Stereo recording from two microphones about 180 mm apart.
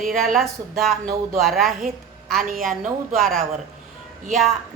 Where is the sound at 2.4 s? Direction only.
50° right (ahead or behind).